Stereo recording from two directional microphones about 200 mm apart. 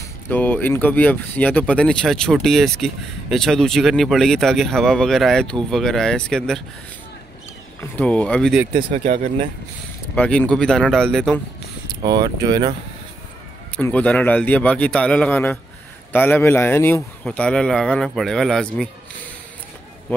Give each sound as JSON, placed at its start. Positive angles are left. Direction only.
{"t": 0.0, "sound": "speech", "side_deg": 10}
{"t": 7.8, "sound": "speech", "side_deg": 5}
{"t": 8.9, "sound": "speech", "side_deg": -40}
{"t": 10.1, "sound": "speech", "side_deg": 5}
{"t": 12.0, "sound": "speech", "side_deg": -20}
{"t": 13.7, "sound": "speech", "side_deg": 5}